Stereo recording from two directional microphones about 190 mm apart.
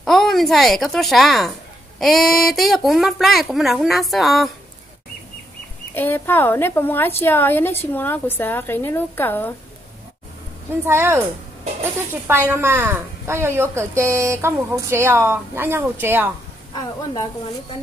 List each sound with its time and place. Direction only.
0.0 s speech: centre (ahead or behind)
5.9 s a woman's voice: 10° left (ahead or behind)
10.9 s a woman's voice: 15° right (ahead or behind)
16.7 s a woman's voice: 20° left (ahead or behind)